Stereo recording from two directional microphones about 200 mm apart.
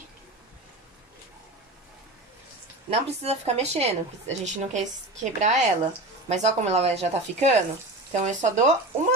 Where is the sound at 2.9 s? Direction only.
30° right (ahead or behind).